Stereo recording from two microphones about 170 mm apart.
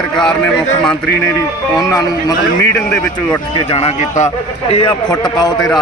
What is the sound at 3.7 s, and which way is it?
Speech, 40° left (ahead or behind).